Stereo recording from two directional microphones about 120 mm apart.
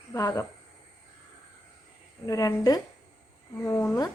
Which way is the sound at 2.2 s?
30° left (ahead or behind).